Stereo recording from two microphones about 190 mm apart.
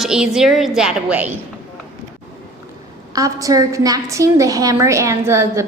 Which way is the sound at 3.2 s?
20° right (ahead or behind).